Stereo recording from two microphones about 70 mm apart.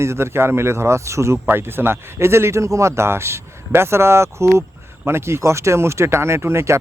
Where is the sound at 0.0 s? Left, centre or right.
Right.